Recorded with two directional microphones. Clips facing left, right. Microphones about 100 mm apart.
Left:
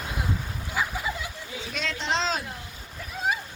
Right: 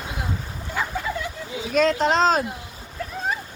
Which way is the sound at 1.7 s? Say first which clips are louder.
Right 11 dB; 45° right (ahead or behind).